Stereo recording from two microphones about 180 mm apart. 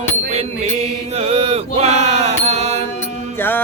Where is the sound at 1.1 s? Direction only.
35° right (ahead or behind).